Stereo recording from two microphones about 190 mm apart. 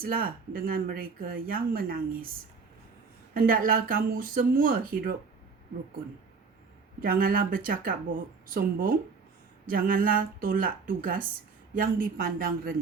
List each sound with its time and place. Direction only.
0.0 s speech: 50° right (ahead or behind)
3.3 s speech: 45° right (ahead or behind)
7.0 s speech: 50° right (ahead or behind)